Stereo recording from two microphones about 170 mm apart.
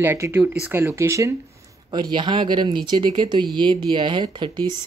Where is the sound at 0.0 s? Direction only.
15° right (ahead or behind).